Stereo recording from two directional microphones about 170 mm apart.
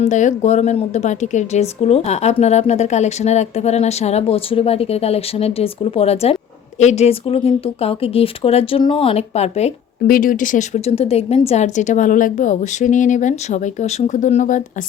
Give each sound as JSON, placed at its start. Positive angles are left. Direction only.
{"t": 0.0, "sound": "a woman's voice", "side_deg": 45}
{"t": 10.1, "sound": "a woman's voice", "side_deg": 55}